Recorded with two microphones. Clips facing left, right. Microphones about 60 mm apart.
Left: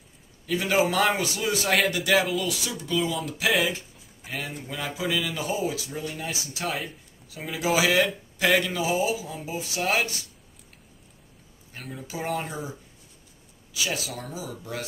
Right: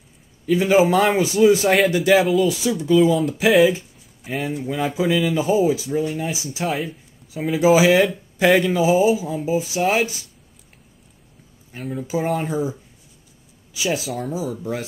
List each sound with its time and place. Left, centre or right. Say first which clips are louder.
0.6 s speech: right 7 dB; centre
2.0 s speech: right 9 dB; centre
2.4 s speech: right 10 dB; right
2.8 s speech: right 12 dB; centre
6.7 s speech: right 7 dB; centre
7.6 s speech: right 8 dB; centre
11.7 s speech: right 11 dB; centre
13.8 s speech: right 10 dB; centre
14.3 s speech: right 9 dB; centre